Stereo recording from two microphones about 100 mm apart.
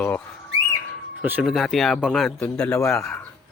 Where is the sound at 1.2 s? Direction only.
15° right (ahead or behind).